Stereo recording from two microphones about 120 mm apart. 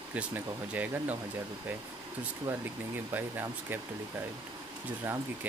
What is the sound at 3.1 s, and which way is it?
Speech, 15° right (ahead or behind).